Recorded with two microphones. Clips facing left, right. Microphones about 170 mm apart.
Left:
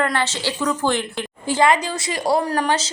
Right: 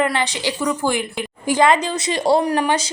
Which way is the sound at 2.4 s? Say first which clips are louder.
Right 2 dB; 15° right (ahead or behind).